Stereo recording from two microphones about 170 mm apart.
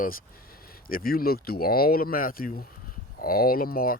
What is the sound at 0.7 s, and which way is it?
Speech, 60° left (ahead or behind).